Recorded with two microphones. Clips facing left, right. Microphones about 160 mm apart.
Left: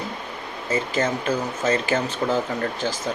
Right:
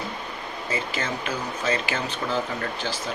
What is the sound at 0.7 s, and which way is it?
Speech, 45° left (ahead or behind).